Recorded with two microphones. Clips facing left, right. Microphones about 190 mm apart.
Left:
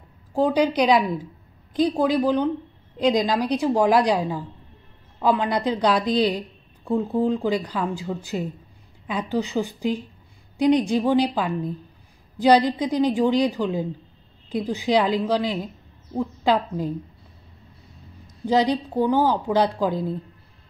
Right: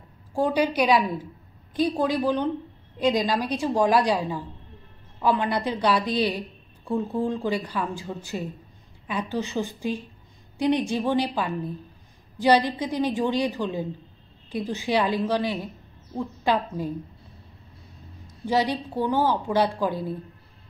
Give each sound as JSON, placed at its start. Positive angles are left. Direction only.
{"t": 0.3, "sound": "a woman's voice", "side_deg": 15}
{"t": 18.5, "sound": "a woman's voice", "side_deg": 15}